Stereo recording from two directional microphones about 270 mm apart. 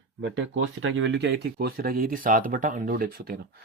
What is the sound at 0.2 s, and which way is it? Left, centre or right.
Speech, right.